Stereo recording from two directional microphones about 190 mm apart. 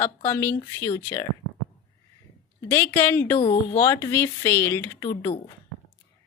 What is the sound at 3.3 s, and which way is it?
Speech, 30° left (ahead or behind).